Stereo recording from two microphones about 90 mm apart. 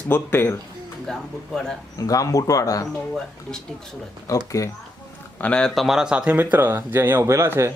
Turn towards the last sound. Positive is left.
turn(degrees=-30)  # may be behind; listen again after turning